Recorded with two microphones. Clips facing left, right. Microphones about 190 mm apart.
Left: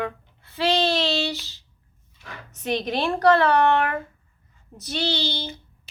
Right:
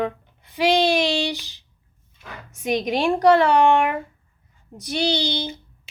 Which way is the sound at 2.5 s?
10° right (ahead or behind).